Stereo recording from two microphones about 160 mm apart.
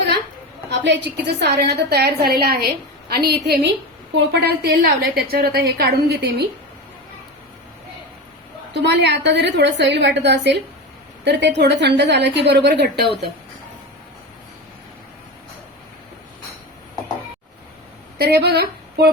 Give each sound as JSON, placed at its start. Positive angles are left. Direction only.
{"t": 0.7, "sound": "a woman's voice", "side_deg": -90}
{"t": 4.4, "sound": "a woman's voice", "side_deg": -75}
{"t": 8.7, "sound": "a woman's voice", "side_deg": -90}
{"t": 18.2, "sound": "speech", "side_deg": -80}